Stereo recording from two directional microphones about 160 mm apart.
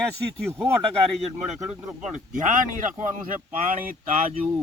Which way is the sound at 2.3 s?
55° right (ahead or behind).